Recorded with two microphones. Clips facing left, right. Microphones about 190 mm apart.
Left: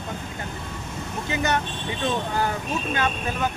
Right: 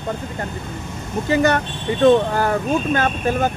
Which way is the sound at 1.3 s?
55° right (ahead or behind).